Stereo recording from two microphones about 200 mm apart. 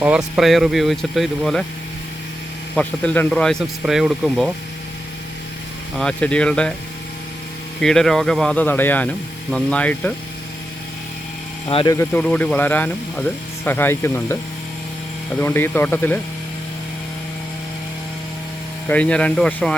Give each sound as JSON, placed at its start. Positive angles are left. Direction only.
{"t": 0.0, "sound": "speech", "side_deg": -5}
{"t": 2.7, "sound": "speech", "side_deg": 5}
{"t": 6.0, "sound": "speech", "side_deg": 5}
{"t": 7.8, "sound": "speech", "side_deg": 0}
{"t": 11.7, "sound": "speech", "side_deg": 25}
{"t": 11.9, "sound": "speech", "side_deg": 5}
{"t": 15.4, "sound": "speech", "side_deg": 10}
{"t": 18.9, "sound": "speech", "side_deg": 5}